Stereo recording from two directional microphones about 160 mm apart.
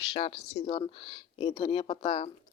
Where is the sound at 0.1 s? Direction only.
35° left (ahead or behind).